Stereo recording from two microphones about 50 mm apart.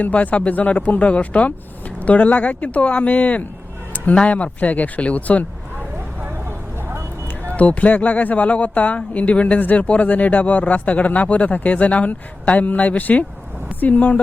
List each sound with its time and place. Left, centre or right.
0.0 s speech: left
7.5 s speech: left